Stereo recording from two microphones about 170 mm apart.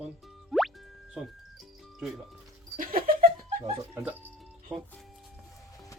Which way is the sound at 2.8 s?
55° right (ahead or behind).